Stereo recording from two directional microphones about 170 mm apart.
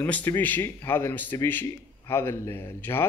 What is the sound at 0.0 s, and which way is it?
Speech, 10° left (ahead or behind).